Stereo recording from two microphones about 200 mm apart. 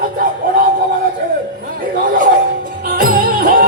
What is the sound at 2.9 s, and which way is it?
Music, 45° right (ahead or behind).